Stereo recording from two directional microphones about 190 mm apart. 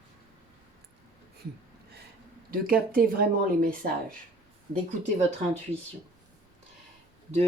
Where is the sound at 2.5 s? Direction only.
50° right (ahead or behind).